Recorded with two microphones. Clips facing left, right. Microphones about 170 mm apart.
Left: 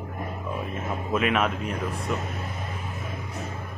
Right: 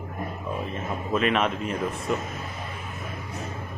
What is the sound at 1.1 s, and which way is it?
Speech, 5° left (ahead or behind).